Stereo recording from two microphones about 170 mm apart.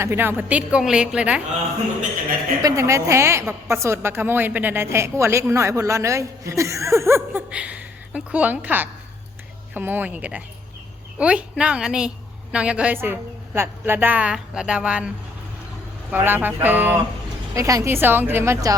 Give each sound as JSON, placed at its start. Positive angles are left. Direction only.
{"t": 0.0, "sound": "a woman's voice", "side_deg": -15}
{"t": 2.6, "sound": "a woman's voice", "side_deg": -20}
{"t": 16.1, "sound": "a woman's voice", "side_deg": -10}